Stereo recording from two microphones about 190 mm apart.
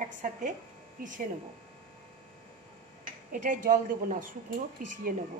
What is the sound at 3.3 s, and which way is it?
Speech, 45° right (ahead or behind).